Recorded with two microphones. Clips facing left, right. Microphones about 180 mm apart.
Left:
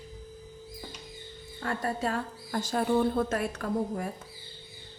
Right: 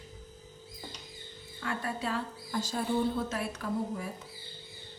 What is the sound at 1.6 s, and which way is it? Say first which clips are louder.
A woman's voice: left 4 dB; 40° left (ahead or behind).